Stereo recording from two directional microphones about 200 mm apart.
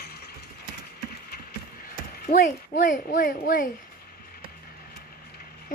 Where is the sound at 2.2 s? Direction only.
40° left (ahead or behind).